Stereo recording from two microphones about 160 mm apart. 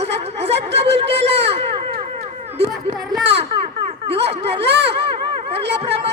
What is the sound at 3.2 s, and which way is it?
Music, 90° right.